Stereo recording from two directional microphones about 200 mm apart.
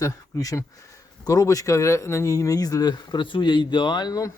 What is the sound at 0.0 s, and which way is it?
Speech, 15° left (ahead or behind).